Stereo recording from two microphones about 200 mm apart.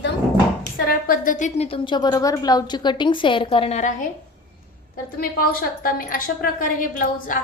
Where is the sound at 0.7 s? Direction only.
45° left (ahead or behind).